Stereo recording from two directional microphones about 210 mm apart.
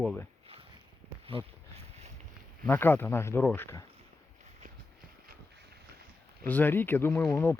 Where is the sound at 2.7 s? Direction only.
10° left (ahead or behind).